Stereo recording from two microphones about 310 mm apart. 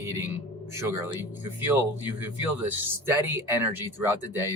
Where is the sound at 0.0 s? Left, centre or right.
Centre.